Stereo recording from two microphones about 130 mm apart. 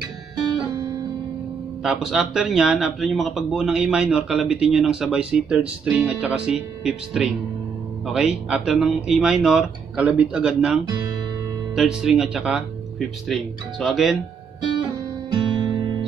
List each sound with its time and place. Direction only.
1.8 s speech: 5° right (ahead or behind)
15.3 s music: 35° right (ahead or behind)